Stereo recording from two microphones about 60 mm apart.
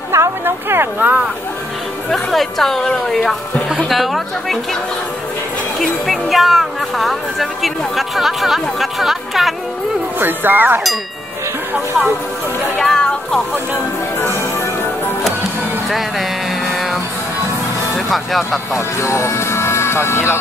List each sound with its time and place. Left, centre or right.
0.1 s a sound: right
0.5 s speech: right
0.9 s speech: right
2.0 s a woman's voice: centre
3.7 s speech: centre
5.8 s speech: centre
10.1 s speech: right
12.8 s music: centre
17.9 s speech: centre
18.7 s speech: left